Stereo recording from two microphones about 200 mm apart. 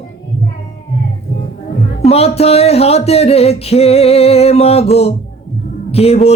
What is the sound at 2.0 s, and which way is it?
Music, 30° left (ahead or behind).